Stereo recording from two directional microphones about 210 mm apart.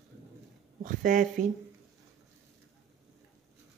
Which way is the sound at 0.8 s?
40° right (ahead or behind).